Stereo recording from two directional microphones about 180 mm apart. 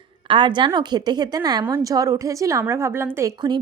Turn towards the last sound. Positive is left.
turn(degrees=-15)  # may be behind; listen again after turning